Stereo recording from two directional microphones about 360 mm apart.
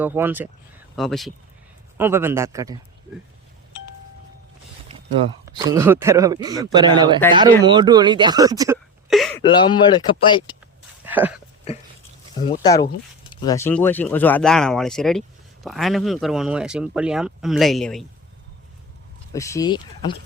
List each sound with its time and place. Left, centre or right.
0.0 s speech: centre
5.5 s speech: centre
9.4 s speech: centre
11.0 s a sound: centre
12.6 s speech: centre
19.3 s speech: centre